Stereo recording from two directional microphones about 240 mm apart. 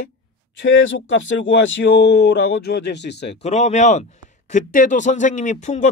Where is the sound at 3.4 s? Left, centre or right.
Left.